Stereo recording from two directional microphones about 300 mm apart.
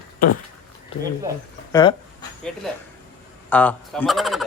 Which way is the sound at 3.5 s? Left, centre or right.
Centre.